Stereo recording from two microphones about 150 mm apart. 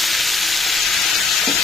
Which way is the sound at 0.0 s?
Centre (ahead or behind).